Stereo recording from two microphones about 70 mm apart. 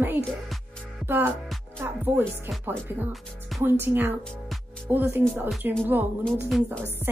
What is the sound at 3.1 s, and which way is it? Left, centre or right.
Speech, centre.